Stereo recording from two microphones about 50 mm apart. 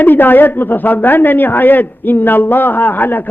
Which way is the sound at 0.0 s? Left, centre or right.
Left.